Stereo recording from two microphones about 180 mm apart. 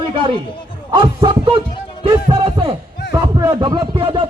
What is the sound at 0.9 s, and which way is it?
Speech, 25° right (ahead or behind).